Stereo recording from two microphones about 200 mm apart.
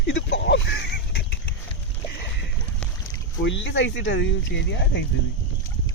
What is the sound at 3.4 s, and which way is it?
Speech, 65° left (ahead or behind).